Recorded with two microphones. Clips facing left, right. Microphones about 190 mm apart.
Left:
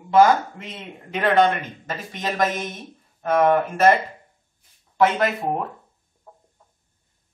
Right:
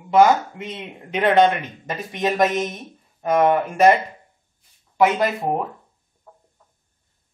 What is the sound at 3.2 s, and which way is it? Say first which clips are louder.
Speech: right 1 dB; 5° right (ahead or behind).